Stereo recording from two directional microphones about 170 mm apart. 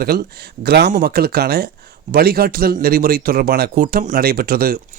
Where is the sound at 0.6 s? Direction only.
80° right.